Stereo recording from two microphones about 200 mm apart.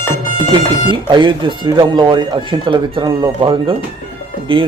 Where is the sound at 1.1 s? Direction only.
25° right (ahead or behind).